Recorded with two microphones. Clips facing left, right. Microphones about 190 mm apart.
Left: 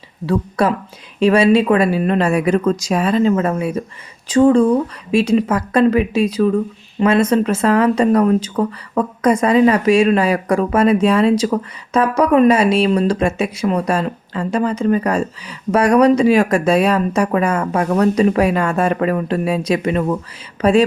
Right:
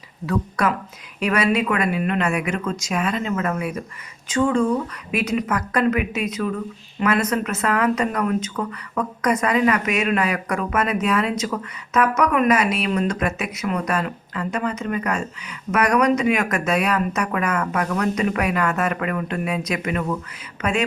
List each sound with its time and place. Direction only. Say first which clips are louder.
0.3 s speech: left 5 dB; 30° left (ahead or behind)